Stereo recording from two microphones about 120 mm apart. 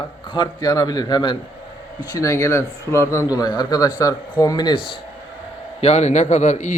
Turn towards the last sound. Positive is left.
turn(degrees=90)